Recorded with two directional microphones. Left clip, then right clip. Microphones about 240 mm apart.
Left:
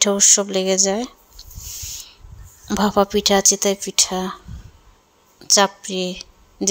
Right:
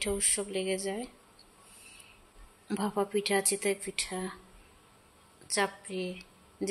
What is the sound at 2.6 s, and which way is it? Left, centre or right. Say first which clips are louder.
Speech: left 15 dB; left.